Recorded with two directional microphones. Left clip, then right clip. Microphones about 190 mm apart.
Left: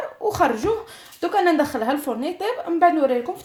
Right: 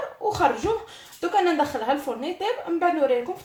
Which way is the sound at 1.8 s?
45° left (ahead or behind).